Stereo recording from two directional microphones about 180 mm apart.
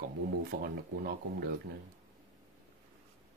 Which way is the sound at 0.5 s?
60° right (ahead or behind).